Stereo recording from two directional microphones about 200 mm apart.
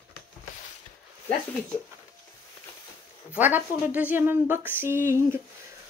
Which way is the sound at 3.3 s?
10° right (ahead or behind).